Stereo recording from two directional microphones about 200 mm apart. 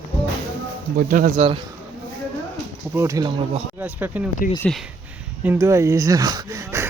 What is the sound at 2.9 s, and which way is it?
Speech, 15° right (ahead or behind).